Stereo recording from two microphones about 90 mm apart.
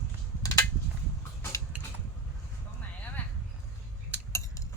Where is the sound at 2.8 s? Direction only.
15° left (ahead or behind).